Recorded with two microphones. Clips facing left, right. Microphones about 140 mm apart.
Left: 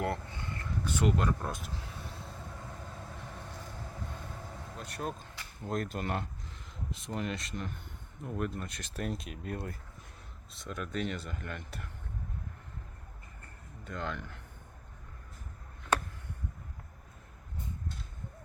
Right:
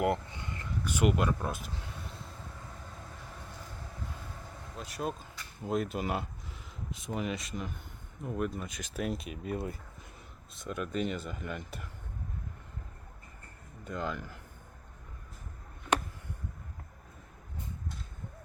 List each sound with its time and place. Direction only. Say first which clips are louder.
0.0 s speech: right 4 dB; 15° right (ahead or behind); by 2.0 s centre (ahead or behind)
4.8 s speech: right 3 dB; centre (ahead or behind)
13.8 s speech: right 2 dB; 5° right (ahead or behind)